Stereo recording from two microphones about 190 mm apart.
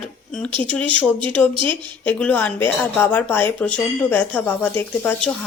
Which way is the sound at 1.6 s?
25° right (ahead or behind).